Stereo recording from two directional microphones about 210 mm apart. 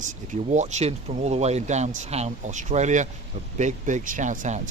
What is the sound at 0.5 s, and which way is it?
Speech, 35° right (ahead or behind).